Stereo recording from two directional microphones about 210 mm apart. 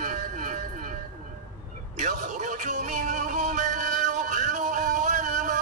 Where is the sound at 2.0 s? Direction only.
35° right (ahead or behind).